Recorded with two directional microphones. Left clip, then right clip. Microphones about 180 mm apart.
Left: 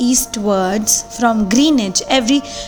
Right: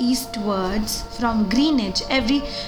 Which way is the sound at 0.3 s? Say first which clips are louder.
Left 8 dB; 40° left (ahead or behind).